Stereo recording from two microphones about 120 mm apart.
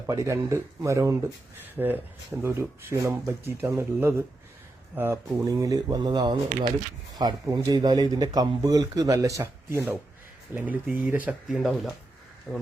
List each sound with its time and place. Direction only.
0.1 s speech: 25° right (ahead or behind); by 12.6 s 5° left (ahead or behind)